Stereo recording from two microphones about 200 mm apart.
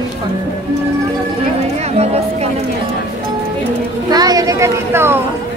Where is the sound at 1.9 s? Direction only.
30° right (ahead or behind).